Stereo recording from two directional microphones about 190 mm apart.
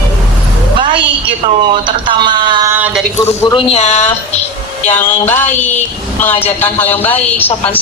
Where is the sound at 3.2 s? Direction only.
20° left (ahead or behind).